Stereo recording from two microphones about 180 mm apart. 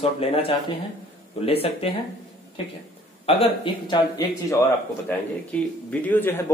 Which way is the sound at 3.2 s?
30° left (ahead or behind).